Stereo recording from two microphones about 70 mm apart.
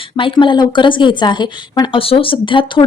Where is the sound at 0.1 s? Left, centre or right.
Left.